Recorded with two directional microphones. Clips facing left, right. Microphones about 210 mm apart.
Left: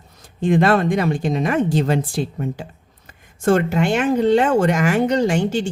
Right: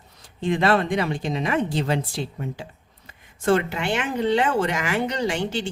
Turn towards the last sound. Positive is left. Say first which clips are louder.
# left 6 dB
turn(degrees=45)  # may be behind; listen again after turning